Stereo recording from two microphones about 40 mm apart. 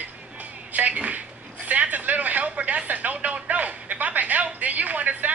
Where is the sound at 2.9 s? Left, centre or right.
Right.